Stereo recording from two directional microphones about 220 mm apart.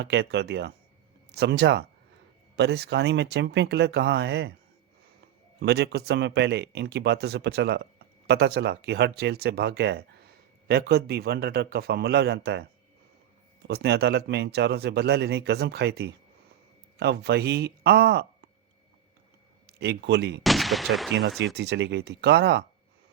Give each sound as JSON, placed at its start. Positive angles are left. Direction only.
{"t": 0.0, "sound": "speech", "side_deg": -50}
{"t": 5.5, "sound": "speech", "side_deg": -50}
{"t": 13.7, "sound": "speech", "side_deg": -50}
{"t": 19.8, "sound": "speech", "side_deg": -50}
{"t": 20.4, "sound": "gunshot", "side_deg": 0}
{"t": 21.2, "sound": "speech", "side_deg": -50}